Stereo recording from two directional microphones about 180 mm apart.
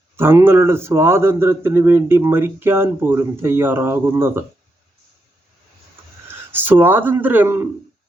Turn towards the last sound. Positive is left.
turn(degrees=-15)  # may be behind; listen again after turning